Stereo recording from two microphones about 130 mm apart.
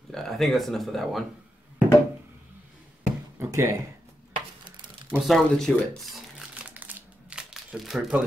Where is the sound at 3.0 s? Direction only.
20° right (ahead or behind).